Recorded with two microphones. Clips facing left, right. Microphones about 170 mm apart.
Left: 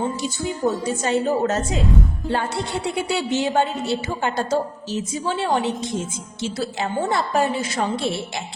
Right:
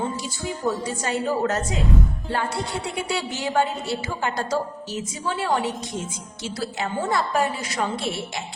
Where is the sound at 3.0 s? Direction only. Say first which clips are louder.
Left 5 dB; 25° left (ahead or behind).